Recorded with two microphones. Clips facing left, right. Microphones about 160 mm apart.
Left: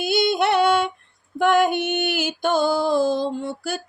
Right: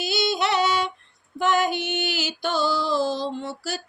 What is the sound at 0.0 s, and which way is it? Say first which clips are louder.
Music: left 4 dB; 55° left (ahead or behind).